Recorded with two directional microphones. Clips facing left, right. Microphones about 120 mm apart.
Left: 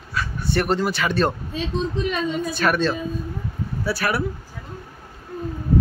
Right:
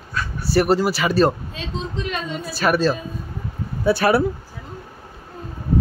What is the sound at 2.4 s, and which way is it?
Speech, 5° right (ahead or behind).